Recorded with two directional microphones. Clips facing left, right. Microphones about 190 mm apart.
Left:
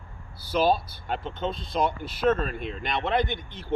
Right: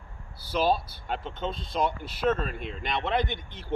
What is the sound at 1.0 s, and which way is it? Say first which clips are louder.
Speech: left 3 dB; centre (ahead or behind).